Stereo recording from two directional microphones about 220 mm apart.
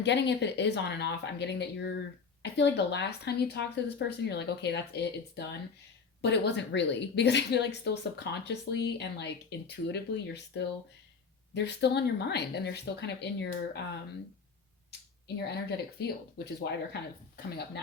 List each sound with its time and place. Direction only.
0.0 s a woman's voice: 50° left (ahead or behind)
16.0 s a woman's voice: 45° left (ahead or behind)